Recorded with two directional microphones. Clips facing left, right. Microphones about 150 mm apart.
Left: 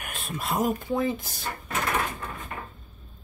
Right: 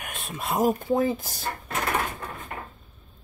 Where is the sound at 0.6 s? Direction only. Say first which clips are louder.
Right 4 dB; 40° right (ahead or behind).